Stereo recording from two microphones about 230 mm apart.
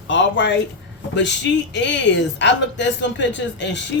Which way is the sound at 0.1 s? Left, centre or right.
Left.